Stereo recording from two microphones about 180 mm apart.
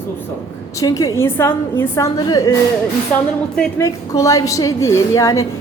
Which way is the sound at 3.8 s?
15° left (ahead or behind).